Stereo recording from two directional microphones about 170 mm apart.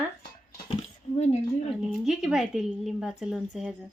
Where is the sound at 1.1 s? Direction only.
40° left (ahead or behind).